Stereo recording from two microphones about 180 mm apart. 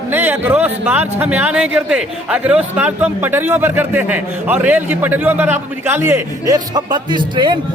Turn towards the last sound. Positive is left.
turn(degrees=-25)  # may be behind; listen again after turning